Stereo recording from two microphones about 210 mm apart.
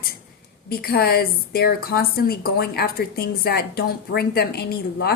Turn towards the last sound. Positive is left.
turn(degrees=50)  # may be behind; listen again after turning